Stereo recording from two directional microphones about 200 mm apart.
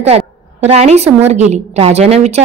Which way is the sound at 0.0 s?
30° right (ahead or behind).